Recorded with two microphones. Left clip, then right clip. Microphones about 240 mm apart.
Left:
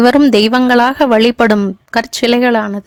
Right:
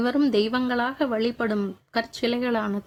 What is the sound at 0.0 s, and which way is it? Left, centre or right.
Speech, left.